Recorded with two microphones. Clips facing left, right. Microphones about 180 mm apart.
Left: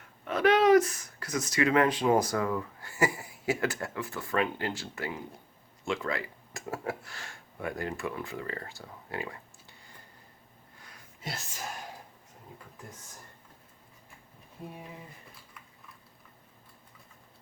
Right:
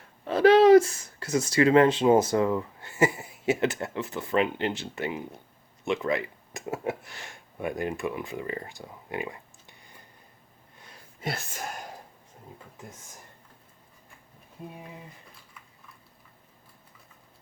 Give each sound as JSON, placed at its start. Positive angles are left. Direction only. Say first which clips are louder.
{"t": 0.3, "sound": "speech", "louder": "right 6 dB", "side_deg": -30}
{"t": 11.2, "sound": "speech", "louder": "right 7 dB", "side_deg": -60}